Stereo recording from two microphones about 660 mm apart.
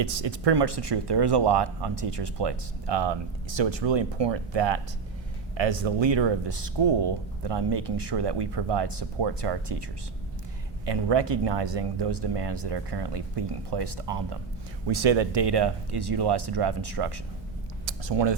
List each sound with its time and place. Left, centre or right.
0.0 s speech: right
10.8 s speech: right